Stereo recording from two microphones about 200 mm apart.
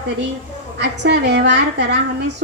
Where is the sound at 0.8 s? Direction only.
60° right (ahead or behind).